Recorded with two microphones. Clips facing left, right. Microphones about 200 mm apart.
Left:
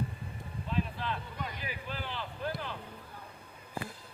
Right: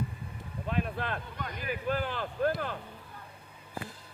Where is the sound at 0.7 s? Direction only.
60° right (ahead or behind).